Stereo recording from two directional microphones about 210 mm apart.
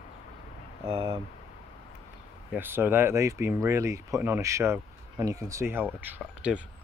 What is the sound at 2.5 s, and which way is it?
Speech, 10° right (ahead or behind).